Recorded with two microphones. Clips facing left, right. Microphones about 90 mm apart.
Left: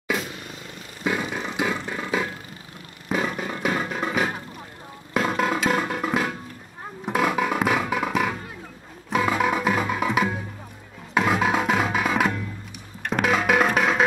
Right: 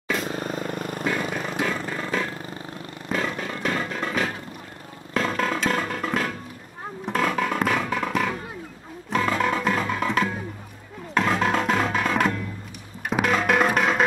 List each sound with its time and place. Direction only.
0.2 s vehicle: 40° right (ahead or behind)
1.0 s music: 5° left (ahead or behind)